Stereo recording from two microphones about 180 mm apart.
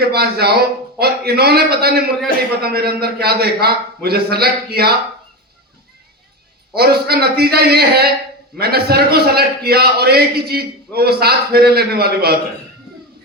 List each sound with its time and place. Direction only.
0.0 s a man's voice: 60° right (ahead or behind)
6.7 s a man's voice: 60° right (ahead or behind)